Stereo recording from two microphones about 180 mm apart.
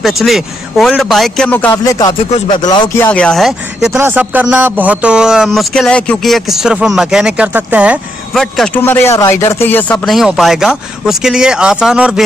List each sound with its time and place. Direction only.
0.0 s speech: centre (ahead or behind)
1.7 s speech: 20° left (ahead or behind)
3.0 s speech: 5° left (ahead or behind)